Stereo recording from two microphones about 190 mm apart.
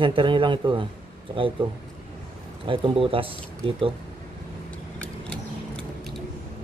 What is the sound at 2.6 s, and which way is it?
Speech, 25° right (ahead or behind).